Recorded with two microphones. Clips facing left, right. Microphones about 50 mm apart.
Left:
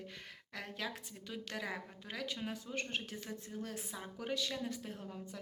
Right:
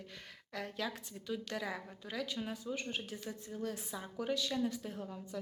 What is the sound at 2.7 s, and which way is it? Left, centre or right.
Speech, left.